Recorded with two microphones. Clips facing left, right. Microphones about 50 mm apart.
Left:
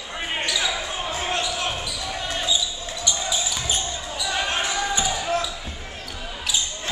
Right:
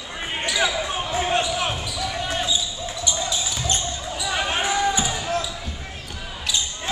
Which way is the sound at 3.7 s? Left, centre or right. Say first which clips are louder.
Right 1 dB; centre.